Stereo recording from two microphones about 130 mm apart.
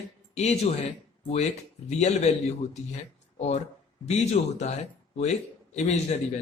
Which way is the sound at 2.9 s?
55° left (ahead or behind).